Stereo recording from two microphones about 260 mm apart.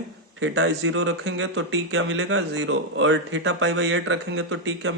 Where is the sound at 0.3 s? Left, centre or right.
Right.